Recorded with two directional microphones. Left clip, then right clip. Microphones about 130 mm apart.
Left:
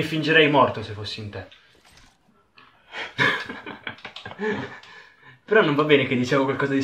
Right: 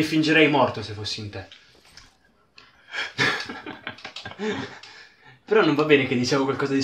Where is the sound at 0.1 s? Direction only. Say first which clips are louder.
Left 2 dB; 25° right (ahead or behind).